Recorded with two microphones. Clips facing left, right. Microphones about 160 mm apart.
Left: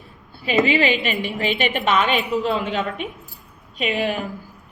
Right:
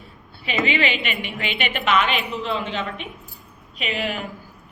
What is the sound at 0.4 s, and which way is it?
A woman's voice, 40° left (ahead or behind).